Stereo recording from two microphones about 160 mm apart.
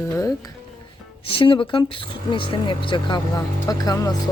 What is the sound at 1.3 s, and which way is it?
Speech, 35° left (ahead or behind).